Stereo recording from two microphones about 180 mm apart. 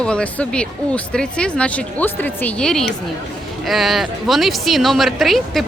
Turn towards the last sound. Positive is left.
turn(degrees=0)  # may be behind; listen again after turning